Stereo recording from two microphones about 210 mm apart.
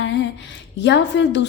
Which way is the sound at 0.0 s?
60° left (ahead or behind).